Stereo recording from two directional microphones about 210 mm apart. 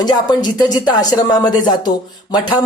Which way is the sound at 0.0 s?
20° left (ahead or behind).